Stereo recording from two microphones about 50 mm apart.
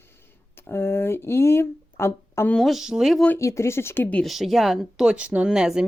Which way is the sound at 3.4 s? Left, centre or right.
Left.